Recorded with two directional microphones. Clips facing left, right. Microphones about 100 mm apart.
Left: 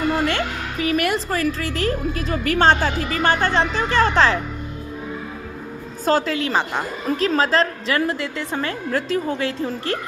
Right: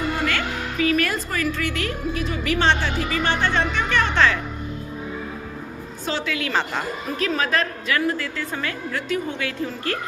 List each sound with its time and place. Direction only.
0.3 s music: 30° left (ahead or behind)
1.3 s a woman's voice: 35° left (ahead or behind)
3.5 s a woman's voice: 35° left (ahead or behind)
6.1 s a woman's voice: 40° left (ahead or behind)
6.5 s a woman's voice: 15° left (ahead or behind)
7.2 s a woman's voice: 30° left (ahead or behind)